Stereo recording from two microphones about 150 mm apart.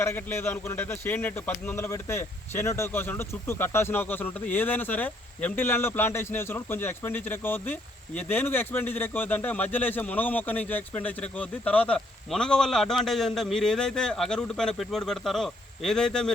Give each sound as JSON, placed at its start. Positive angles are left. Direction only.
{"t": 0.0, "sound": "speech", "side_deg": 15}